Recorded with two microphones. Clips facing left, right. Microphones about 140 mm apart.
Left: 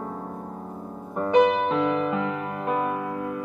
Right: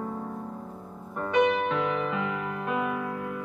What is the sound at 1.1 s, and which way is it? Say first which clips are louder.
Music: left 5 dB; 30° left (ahead or behind).